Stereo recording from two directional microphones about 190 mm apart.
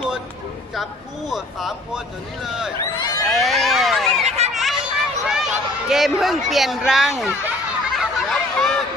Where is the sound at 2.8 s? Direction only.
20° left (ahead or behind).